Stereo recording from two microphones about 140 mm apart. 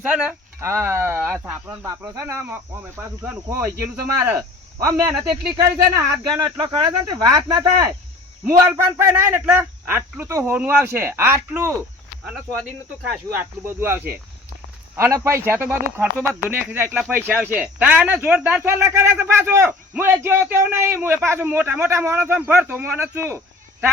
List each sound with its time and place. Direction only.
0.0 s speech: 10° right (ahead or behind)
13.4 s speech: 15° right (ahead or behind)